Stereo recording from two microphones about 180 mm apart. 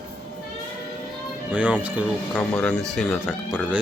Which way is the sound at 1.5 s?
5° right (ahead or behind).